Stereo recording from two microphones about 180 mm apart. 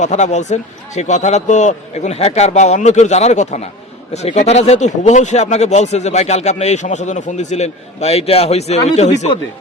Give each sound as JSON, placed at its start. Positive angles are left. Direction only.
{"t": 0.0, "sound": "speech", "side_deg": 40}